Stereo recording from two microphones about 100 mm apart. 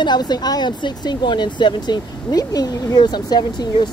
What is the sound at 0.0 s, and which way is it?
Speech, 45° left (ahead or behind).